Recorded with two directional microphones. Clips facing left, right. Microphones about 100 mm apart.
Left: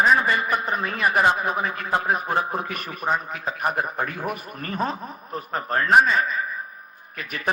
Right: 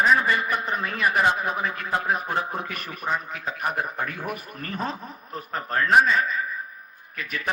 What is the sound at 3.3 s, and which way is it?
Speech, 10° left (ahead or behind).